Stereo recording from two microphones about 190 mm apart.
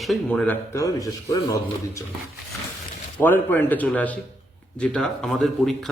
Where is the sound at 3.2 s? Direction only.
10° left (ahead or behind).